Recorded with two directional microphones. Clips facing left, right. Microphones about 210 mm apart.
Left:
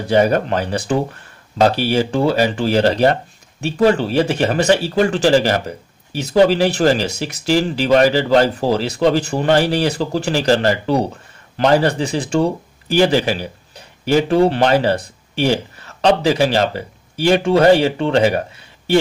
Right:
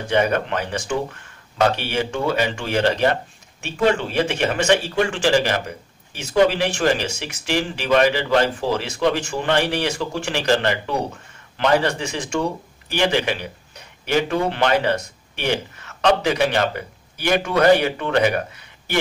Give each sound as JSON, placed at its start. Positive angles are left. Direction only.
{"t": 0.0, "sound": "speech", "side_deg": 35}